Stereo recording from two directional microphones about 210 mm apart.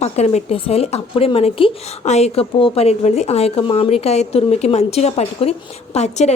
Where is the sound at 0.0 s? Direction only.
30° left (ahead or behind).